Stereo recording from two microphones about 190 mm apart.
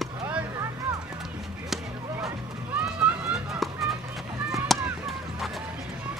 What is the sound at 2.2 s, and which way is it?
Music, 5° right (ahead or behind).